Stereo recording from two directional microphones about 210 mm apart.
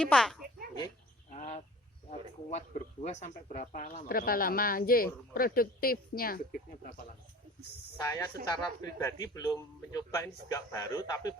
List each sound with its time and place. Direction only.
0.0 s a child's voice: centre (ahead or behind)
1.4 s duck: 30° left (ahead or behind)
2.0 s speech: 30° left (ahead or behind)
8.0 s a man's voice: 15° left (ahead or behind)